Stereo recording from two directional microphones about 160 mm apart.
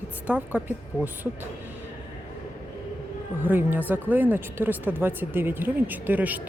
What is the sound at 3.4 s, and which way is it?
Speech, 10° right (ahead or behind).